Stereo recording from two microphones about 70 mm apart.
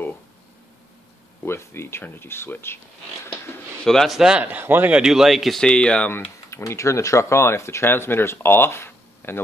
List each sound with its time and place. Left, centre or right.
1.4 s speech: left
3.8 s speech: centre
4.4 s speech: right
4.9 s speech: centre
5.6 s speech: centre
6.0 s speech: left
6.7 s speech: left